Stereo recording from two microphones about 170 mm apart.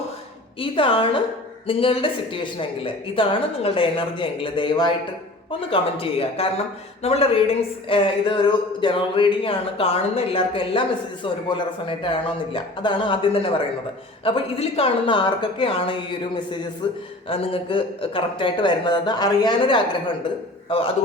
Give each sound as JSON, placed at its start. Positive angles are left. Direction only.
{"t": 0.6, "sound": "a man's voice", "side_deg": 30}